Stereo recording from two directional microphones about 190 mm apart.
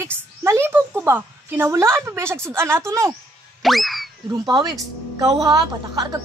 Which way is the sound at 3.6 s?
Centre (ahead or behind).